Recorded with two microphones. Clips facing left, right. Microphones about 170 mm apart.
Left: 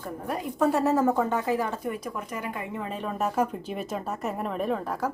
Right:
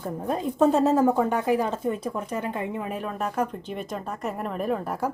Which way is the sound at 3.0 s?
Centre (ahead or behind).